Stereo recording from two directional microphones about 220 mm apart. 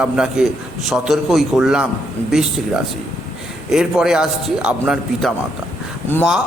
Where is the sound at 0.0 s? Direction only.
5° right (ahead or behind).